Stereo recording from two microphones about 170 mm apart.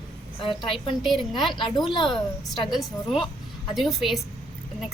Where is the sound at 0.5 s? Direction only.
Centre (ahead or behind).